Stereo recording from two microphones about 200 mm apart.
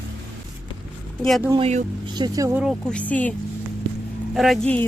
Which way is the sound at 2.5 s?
Centre (ahead or behind).